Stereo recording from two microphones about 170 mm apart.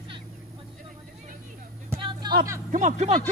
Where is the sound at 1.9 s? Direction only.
30° right (ahead or behind).